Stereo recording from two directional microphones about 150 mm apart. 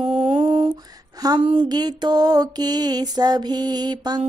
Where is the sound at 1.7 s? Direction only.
30° right (ahead or behind).